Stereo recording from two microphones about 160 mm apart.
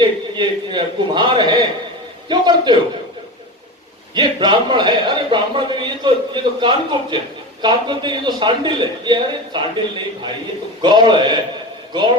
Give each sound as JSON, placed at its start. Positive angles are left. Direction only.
{"t": 0.0, "sound": "a man's voice", "side_deg": -30}
{"t": 4.1, "sound": "a man's voice", "side_deg": -30}